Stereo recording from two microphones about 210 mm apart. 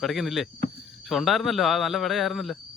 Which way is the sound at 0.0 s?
Centre (ahead or behind).